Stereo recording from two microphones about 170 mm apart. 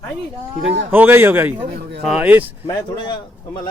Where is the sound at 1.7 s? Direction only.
75° right (ahead or behind).